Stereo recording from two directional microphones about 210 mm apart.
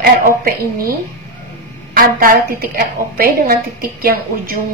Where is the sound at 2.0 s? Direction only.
45° right (ahead or behind).